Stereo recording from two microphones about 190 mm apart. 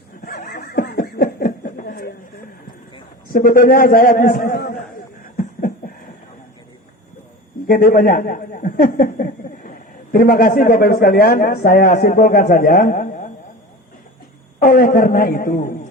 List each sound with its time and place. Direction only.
0.2 s snicker: 50° left (ahead or behind)
3.3 s a man's voice: 45° left (ahead or behind)
5.2 s a sound: 45° left (ahead or behind)
7.7 s a man's voice: 50° left (ahead or behind)
14.6 s a man's voice: 45° left (ahead or behind)